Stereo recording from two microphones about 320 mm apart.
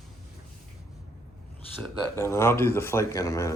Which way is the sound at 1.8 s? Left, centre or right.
Centre.